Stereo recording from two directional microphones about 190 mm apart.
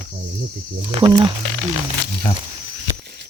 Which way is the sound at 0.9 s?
30° right (ahead or behind).